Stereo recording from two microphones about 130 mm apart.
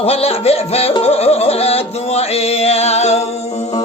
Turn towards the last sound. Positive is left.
turn(degrees=55)  # may be behind; listen again after turning